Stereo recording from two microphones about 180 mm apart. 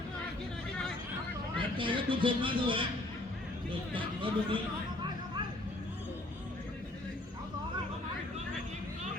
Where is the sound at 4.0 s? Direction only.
30° right (ahead or behind).